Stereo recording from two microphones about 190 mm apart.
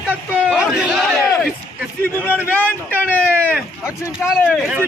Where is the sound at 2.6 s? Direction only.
10° left (ahead or behind).